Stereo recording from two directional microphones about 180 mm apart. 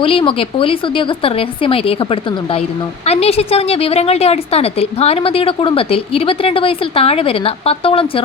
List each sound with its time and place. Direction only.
0.0 s a woman's voice: 30° left (ahead or behind)